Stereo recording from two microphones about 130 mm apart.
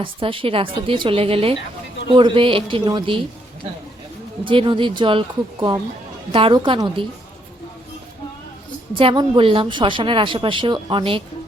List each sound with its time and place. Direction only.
0.0 s a woman's voice: 40° right (ahead or behind)
4.4 s a woman's voice: 40° right (ahead or behind)
6.3 s a woman's voice: 40° right (ahead or behind)
9.0 s a woman's voice: 40° right (ahead or behind)